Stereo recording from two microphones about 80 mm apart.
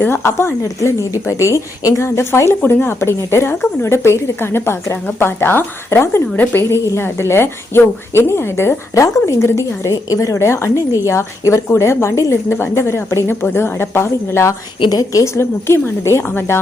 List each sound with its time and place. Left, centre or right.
0.0 s a woman's voice: left
2.6 s a woman's voice: left
14.8 s a woman's voice: left